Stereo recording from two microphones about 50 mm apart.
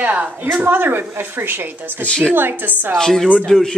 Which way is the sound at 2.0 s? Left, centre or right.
Centre.